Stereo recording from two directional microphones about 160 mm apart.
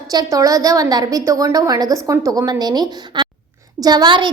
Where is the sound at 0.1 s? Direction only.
20° right (ahead or behind).